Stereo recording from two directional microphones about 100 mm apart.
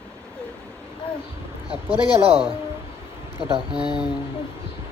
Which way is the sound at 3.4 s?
60° right (ahead or behind).